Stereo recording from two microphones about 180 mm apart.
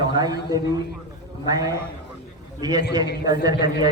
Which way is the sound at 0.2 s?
20° right (ahead or behind).